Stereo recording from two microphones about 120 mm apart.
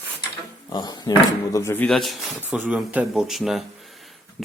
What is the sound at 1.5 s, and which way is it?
Speech, 20° left (ahead or behind).